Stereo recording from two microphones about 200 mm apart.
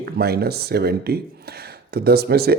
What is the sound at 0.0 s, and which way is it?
Speech, 50° right (ahead or behind).